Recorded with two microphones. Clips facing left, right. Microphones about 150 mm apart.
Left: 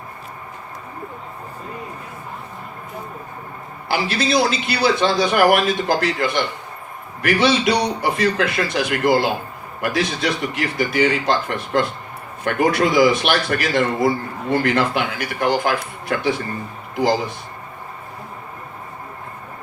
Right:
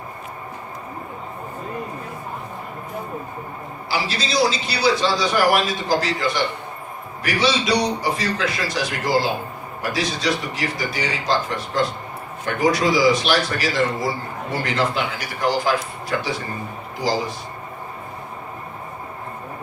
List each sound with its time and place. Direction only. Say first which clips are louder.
3.8 s a man's voice: left 5 dB; 55° left (ahead or behind)